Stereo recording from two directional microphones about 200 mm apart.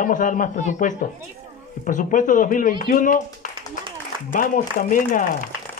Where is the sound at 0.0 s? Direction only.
40° left (ahead or behind).